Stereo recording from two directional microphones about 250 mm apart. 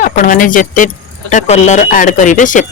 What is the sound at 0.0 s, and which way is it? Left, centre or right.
Speech, left.